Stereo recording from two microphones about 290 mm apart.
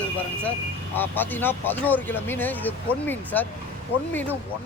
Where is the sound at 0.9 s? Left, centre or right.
Centre.